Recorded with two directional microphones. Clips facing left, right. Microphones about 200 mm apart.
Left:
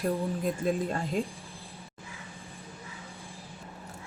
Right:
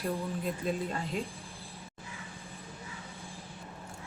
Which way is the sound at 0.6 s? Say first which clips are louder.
Left 5 dB; 45° left (ahead or behind).